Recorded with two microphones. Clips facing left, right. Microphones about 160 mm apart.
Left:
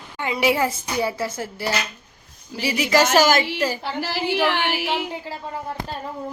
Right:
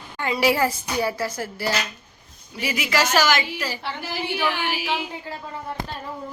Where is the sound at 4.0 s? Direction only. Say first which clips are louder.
Left 6 dB; 90° left.